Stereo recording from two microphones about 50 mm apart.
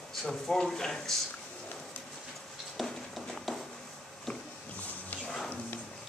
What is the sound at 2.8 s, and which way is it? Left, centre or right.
Music, centre.